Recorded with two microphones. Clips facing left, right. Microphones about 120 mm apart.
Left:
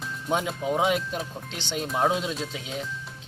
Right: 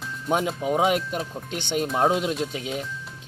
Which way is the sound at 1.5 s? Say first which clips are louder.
Right 8 dB; 55° right (ahead or behind).